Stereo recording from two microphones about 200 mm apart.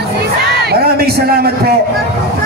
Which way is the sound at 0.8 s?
50° right (ahead or behind).